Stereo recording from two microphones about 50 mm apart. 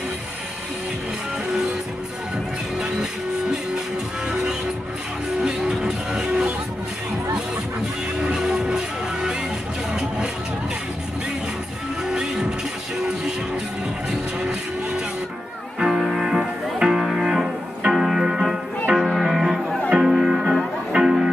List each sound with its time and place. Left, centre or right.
5.4 s music: centre
8.2 s music: centre
9.9 s vehicle: centre
12.1 s music: centre
15.8 s music: centre